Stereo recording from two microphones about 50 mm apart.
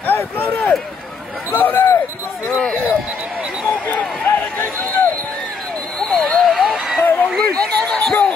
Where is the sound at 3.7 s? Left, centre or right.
Left.